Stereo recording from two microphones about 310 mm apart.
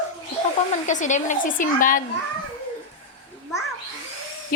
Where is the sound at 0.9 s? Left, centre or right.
Left.